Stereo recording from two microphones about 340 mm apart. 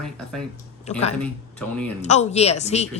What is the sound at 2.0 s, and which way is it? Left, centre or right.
A woman's voice, centre.